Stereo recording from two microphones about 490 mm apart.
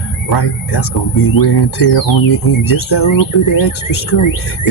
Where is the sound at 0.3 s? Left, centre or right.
Left.